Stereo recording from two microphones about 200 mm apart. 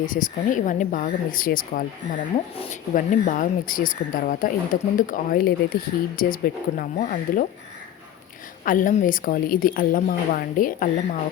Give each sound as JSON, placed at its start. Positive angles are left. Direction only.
{"t": 0.0, "sound": "speech", "side_deg": 40}
{"t": 8.6, "sound": "speech", "side_deg": 40}